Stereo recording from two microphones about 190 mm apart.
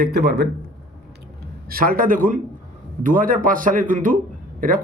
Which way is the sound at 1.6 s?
50° right (ahead or behind).